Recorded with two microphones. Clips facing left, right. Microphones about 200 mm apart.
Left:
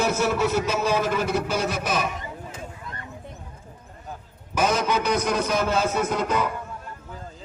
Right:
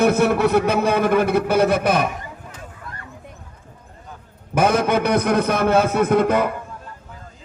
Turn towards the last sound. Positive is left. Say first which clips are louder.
# right 7 dB
turn(degrees=-60)  # may be behind; listen again after turning